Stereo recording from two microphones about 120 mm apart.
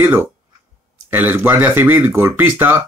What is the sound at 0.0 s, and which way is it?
Speech, 15° right (ahead or behind).